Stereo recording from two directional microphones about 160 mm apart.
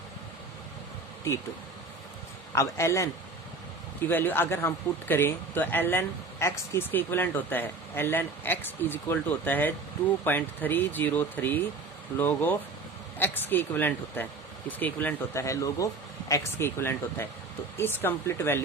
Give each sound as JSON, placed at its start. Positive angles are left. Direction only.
{"t": 2.6, "sound": "a man's voice", "side_deg": 20}
{"t": 4.1, "sound": "a man's voice", "side_deg": 15}